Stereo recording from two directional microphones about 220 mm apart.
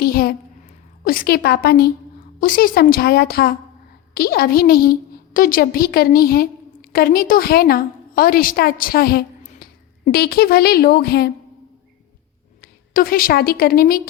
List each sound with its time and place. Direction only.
0.0 s a sound: 45° left (ahead or behind)
1.0 s a woman's voice: 40° left (ahead or behind)
12.6 s a woman's voice: 40° left (ahead or behind)